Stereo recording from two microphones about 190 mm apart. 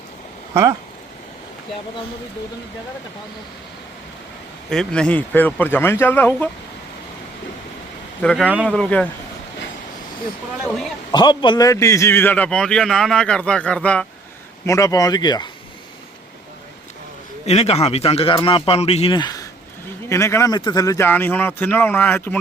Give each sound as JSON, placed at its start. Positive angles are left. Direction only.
{"t": 0.5, "sound": "speech", "side_deg": -15}
{"t": 4.7, "sound": "speech", "side_deg": 5}
{"t": 8.2, "sound": "a man's voice", "side_deg": 5}
{"t": 8.4, "sound": "speech", "side_deg": -5}
{"t": 8.7, "sound": "a man's voice", "side_deg": 5}
{"t": 11.1, "sound": "a man's voice", "side_deg": 25}
{"t": 14.7, "sound": "speech", "side_deg": 15}
{"t": 17.4, "sound": "speech", "side_deg": 35}